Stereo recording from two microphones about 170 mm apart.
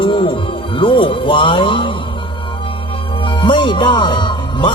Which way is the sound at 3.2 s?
30° left (ahead or behind).